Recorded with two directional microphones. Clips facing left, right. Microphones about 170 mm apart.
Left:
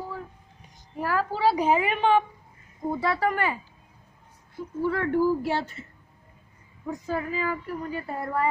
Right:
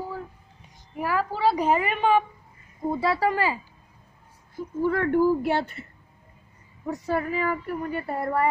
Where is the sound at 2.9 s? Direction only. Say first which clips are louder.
Right 2 dB; 30° right (ahead or behind).